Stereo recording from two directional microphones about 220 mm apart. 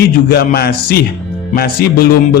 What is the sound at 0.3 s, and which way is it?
Speech, 45° left (ahead or behind).